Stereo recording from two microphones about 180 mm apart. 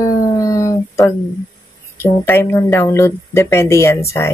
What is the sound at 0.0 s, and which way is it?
Dog, 20° left (ahead or behind).